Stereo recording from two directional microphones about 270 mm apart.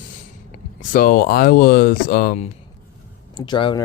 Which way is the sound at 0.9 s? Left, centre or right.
Left.